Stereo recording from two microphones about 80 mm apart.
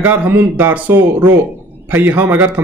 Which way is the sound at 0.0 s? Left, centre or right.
Right.